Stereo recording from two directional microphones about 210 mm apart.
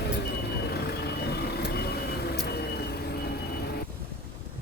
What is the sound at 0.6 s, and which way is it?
Vehicle, 50° left (ahead or behind).